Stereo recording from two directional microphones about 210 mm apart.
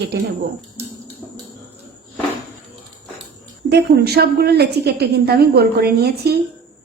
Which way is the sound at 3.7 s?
50° right (ahead or behind).